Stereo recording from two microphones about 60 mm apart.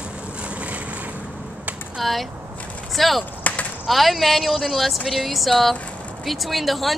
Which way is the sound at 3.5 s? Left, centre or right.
Left.